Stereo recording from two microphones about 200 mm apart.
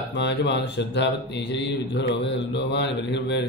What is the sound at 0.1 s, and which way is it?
Speech, 60° left (ahead or behind).